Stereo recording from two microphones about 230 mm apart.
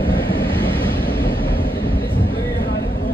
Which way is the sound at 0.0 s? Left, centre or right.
Left.